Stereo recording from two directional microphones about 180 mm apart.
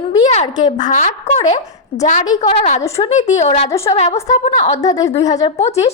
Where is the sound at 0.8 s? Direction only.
40° left (ahead or behind).